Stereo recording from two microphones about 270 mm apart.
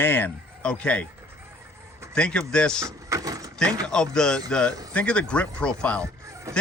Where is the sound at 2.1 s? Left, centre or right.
Centre.